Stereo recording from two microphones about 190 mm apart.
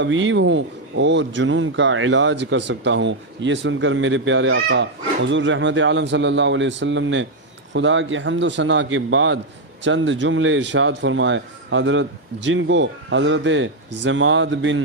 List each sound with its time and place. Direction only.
0.0 s a man's voice: 80° right
9.8 s speech: 75° right (ahead or behind)